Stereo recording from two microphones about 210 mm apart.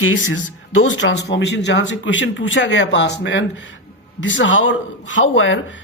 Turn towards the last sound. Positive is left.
turn(degrees=65)  # may be behind; listen again after turning